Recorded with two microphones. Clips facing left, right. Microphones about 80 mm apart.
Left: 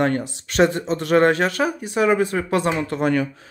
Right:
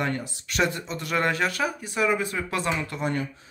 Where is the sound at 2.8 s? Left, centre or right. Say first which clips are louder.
Left 8 dB; left.